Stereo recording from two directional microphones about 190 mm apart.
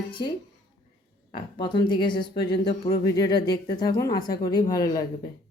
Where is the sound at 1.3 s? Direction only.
25° left (ahead or behind).